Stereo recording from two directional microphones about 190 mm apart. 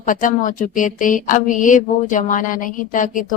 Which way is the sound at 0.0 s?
45° left (ahead or behind).